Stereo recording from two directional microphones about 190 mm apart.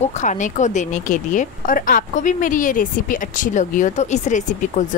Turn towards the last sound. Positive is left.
turn(degrees=40)  # may be behind; listen again after turning